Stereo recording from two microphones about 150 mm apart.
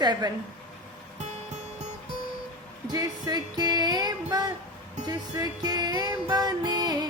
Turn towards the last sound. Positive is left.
turn(degrees=-25)  # may be behind; listen again after turning